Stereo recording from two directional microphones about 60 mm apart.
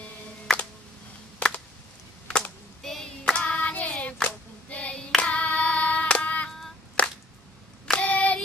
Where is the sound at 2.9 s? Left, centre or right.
Centre.